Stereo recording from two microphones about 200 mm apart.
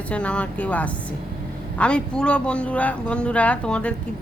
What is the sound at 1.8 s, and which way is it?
Speech, 5° left (ahead or behind).